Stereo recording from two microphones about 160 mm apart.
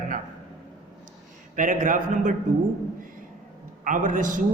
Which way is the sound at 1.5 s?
55° right (ahead or behind).